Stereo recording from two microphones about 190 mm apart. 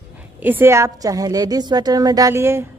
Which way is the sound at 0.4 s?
10° right (ahead or behind).